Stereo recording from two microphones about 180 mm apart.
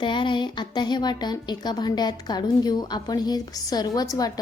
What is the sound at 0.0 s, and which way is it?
A woman's voice, 25° left (ahead or behind).